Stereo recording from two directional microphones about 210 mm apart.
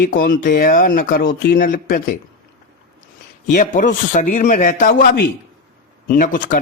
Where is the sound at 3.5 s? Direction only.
40° left (ahead or behind).